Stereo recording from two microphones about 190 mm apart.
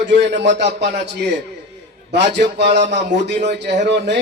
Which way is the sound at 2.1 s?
65° right (ahead or behind).